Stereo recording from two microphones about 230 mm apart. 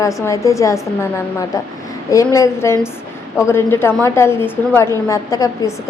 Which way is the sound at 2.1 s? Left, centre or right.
Centre.